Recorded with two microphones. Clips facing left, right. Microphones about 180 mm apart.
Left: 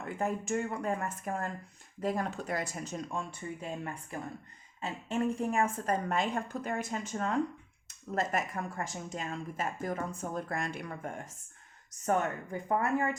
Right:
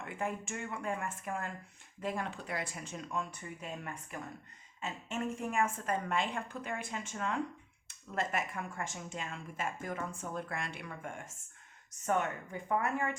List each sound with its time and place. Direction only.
0.0 s speech: 40° left (ahead or behind)